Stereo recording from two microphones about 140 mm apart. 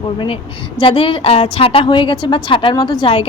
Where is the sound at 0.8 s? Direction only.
40° left (ahead or behind).